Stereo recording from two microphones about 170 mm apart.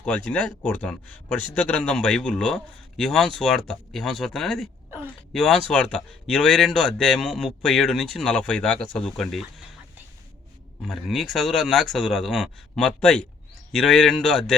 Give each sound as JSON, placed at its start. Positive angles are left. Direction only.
{"t": 0.0, "sound": "speech", "side_deg": 5}
{"t": 10.8, "sound": "speech", "side_deg": 0}